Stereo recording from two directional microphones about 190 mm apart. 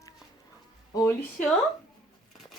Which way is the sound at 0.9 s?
15° left (ahead or behind).